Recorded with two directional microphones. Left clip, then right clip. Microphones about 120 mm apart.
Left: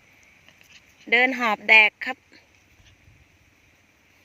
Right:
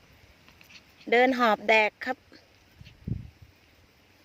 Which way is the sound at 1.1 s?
5° right (ahead or behind).